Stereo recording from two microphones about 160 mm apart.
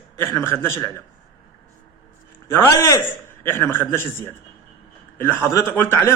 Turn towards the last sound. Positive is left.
turn(degrees=10)  # may be behind; listen again after turning